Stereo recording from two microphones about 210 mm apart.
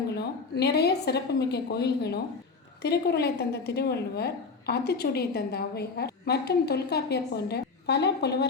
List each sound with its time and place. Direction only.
0.1 s speech: 50° left (ahead or behind)